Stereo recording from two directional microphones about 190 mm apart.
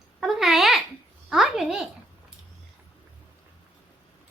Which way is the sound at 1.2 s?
Centre (ahead or behind).